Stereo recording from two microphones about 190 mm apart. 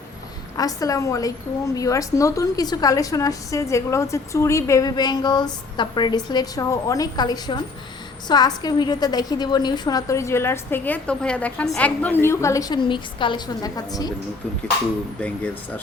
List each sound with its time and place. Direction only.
0.5 s a woman's voice: 20° left (ahead or behind)